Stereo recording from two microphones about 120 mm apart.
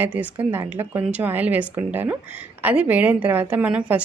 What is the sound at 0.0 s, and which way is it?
A woman's voice, 15° right (ahead or behind).